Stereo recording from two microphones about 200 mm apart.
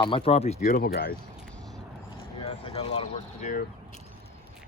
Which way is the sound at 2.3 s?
30° left (ahead or behind).